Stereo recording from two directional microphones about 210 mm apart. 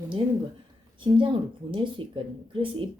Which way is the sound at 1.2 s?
25° right (ahead or behind).